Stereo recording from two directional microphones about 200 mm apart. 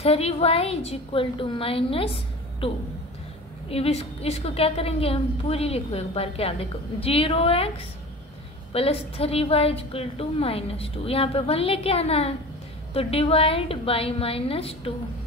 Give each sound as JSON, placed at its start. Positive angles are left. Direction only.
{"t": 0.0, "sound": "a woman's voice", "side_deg": 30}
{"t": 3.7, "sound": "a woman's voice", "side_deg": 30}
{"t": 8.7, "sound": "a woman's voice", "side_deg": 30}